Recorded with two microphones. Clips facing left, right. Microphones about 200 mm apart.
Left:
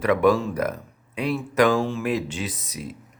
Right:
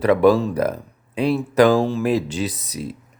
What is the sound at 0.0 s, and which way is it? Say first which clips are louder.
Speech: right 4 dB; 35° right (ahead or behind).